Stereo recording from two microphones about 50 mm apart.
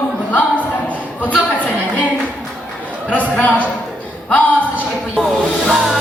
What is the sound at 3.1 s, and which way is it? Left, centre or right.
A woman's voice, left.